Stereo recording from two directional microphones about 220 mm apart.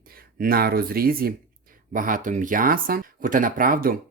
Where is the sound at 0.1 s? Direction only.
40° right (ahead or behind).